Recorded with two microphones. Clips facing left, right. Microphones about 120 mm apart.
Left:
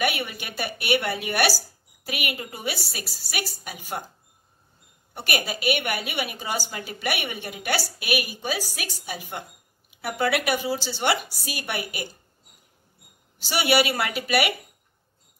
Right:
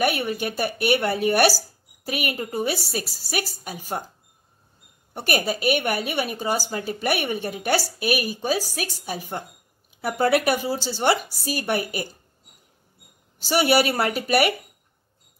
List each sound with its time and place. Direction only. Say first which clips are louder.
0.0 s a woman's voice: right 4 dB; 40° right (ahead or behind)
5.1 s a woman's voice: right 4 dB; 40° right (ahead or behind)
13.4 s a woman's voice: right 3 dB; 40° right (ahead or behind)